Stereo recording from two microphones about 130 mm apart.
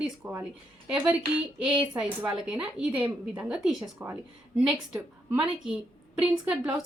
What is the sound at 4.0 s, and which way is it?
Speech, 20° right (ahead or behind).